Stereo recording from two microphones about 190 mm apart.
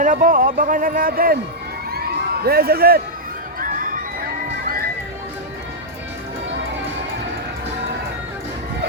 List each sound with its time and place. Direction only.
0.0 s speech: 45° right (ahead or behind)
1.9 s a sound: 55° right (ahead or behind)
3.6 s crowd: 45° right (ahead or behind)